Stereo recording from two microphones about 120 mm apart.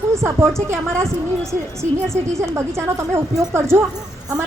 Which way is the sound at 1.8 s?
25° right (ahead or behind).